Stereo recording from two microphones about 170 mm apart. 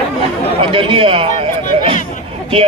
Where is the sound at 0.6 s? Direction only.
30° right (ahead or behind).